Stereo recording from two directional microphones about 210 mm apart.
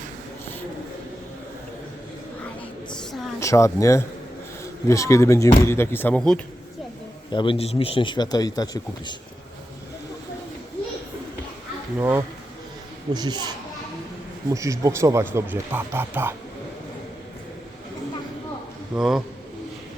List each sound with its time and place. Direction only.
3.4 s speech: 15° left (ahead or behind)
7.3 s speech: 25° left (ahead or behind)
11.9 s speech: 10° right (ahead or behind)
13.1 s a child's voice: 20° right (ahead or behind)
14.5 s speech: 15° right (ahead or behind)
18.9 s a man's voice: centre (ahead or behind)